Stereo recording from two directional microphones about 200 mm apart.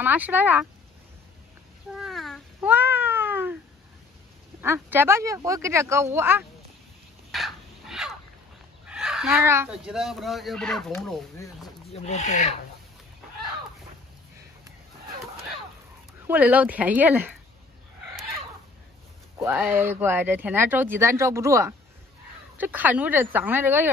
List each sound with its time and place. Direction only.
0.0 s speech: 10° right (ahead or behind)
2.0 s a sound: centre (ahead or behind)
2.7 s cat: 10° right (ahead or behind)
4.6 s speech: 10° right (ahead or behind)
7.2 s crow: centre (ahead or behind)
8.8 s fowl: 5° right (ahead or behind)
9.4 s speech: 10° right (ahead or behind)
11.9 s speech: 35° left (ahead or behind)
16.2 s speech: 10° right (ahead or behind)
19.3 s speech: 10° right (ahead or behind)